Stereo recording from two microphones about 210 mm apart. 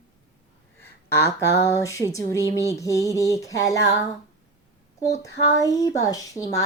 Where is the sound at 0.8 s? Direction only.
15° left (ahead or behind).